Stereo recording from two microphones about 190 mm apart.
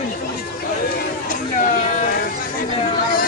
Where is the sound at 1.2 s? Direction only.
45° left (ahead or behind).